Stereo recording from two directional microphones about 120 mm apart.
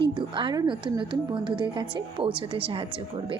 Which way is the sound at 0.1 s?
40° right (ahead or behind).